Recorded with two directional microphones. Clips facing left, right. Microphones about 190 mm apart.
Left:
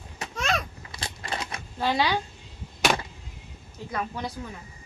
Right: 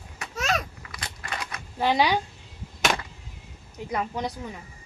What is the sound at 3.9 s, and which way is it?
Speech, 20° right (ahead or behind).